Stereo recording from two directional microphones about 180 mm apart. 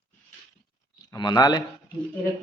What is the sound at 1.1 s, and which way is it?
Speech, 20° left (ahead or behind).